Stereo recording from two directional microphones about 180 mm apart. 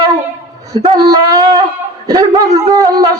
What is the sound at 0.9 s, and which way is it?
Shofar, 20° right (ahead or behind).